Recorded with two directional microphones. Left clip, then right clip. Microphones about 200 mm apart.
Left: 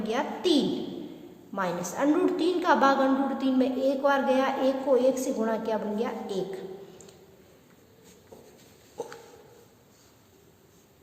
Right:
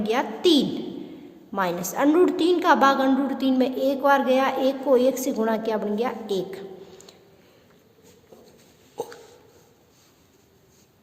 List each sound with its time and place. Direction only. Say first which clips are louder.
0.0 s a woman's voice: right 6 dB; 45° right (ahead or behind)